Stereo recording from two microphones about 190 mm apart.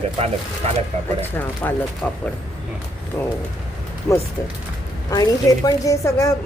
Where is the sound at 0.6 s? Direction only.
35° right (ahead or behind).